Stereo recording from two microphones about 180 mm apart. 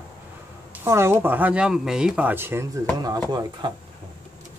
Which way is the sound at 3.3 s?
25° right (ahead or behind).